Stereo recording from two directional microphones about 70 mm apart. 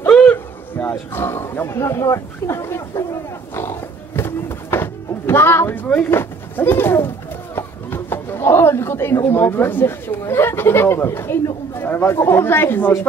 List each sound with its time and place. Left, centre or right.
0.1 s speech: left
4.2 s music: left
5.9 s speech: left